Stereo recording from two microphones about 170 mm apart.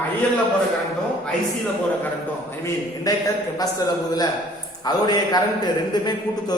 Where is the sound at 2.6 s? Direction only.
20° left (ahead or behind).